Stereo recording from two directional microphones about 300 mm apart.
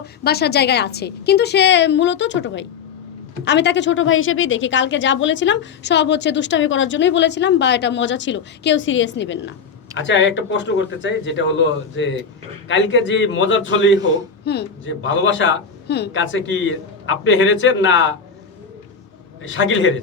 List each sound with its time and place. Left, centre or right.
0.0 s a woman's voice: left
19.4 s a woman's voice: left